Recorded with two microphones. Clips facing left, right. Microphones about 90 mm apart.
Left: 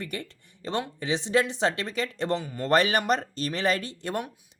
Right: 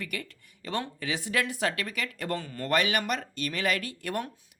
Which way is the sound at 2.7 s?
35° left (ahead or behind).